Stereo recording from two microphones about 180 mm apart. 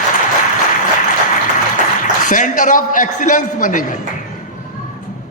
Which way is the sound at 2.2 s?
45° left (ahead or behind).